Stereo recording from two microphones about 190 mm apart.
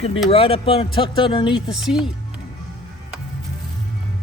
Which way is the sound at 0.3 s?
30° left (ahead or behind).